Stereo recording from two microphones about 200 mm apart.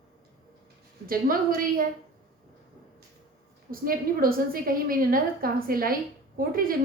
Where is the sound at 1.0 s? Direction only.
45° right (ahead or behind).